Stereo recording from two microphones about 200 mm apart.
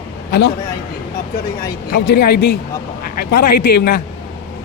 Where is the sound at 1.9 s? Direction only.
50° left (ahead or behind).